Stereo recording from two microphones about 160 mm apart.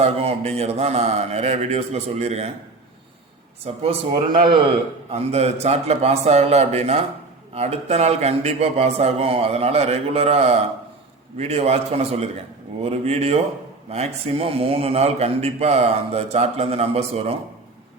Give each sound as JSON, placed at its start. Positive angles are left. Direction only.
{"t": 0.0, "sound": "a man's voice", "side_deg": -40}
{"t": 3.8, "sound": "a man's voice", "side_deg": -30}
{"t": 5.1, "sound": "a man's voice", "side_deg": -40}